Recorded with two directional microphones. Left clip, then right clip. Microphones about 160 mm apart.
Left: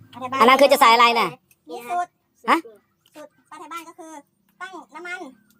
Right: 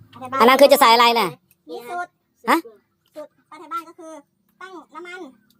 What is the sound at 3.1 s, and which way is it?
Speech, 25° left (ahead or behind).